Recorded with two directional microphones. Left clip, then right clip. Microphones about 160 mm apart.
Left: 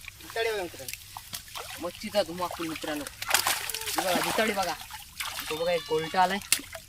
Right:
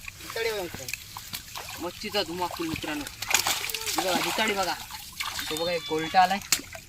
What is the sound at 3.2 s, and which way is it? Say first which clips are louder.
Splash: right 1 dB; centre (ahead or behind).